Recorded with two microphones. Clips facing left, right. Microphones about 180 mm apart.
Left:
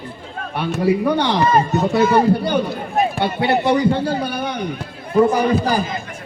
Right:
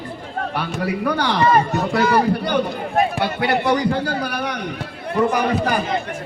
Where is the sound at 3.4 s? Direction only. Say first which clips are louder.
Left 3 dB; 25° left (ahead or behind).